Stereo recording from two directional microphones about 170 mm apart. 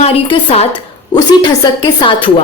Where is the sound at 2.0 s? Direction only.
30° left (ahead or behind).